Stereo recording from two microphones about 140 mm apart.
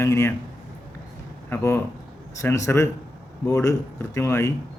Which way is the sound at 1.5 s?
20° left (ahead or behind).